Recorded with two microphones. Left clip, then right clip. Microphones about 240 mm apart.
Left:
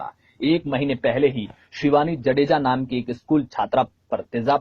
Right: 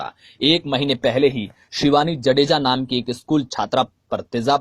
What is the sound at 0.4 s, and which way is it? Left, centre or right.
Speech, right.